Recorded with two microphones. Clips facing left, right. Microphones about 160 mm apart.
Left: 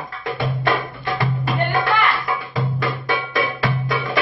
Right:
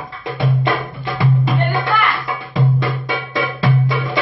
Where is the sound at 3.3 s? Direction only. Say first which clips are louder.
Right 3 dB; 25° right (ahead or behind).